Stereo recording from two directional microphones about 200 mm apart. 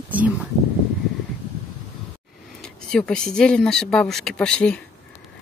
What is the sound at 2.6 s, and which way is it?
Speech, 5° left (ahead or behind).